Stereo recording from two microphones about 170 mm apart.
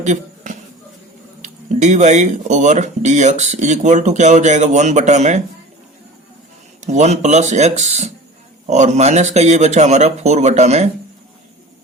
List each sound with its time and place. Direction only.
0.0 s a sound: 45° right (ahead or behind)
1.4 s speech: 45° right (ahead or behind)
6.8 s speech: 40° right (ahead or behind)